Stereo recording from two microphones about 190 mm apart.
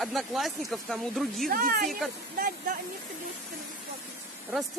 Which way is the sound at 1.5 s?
50° right (ahead or behind).